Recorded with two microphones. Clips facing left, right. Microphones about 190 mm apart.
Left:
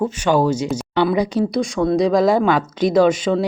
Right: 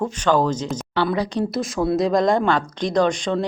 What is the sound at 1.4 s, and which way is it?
Speech, centre (ahead or behind).